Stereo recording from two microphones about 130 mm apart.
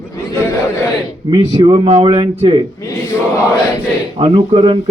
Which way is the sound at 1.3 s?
35° right (ahead or behind).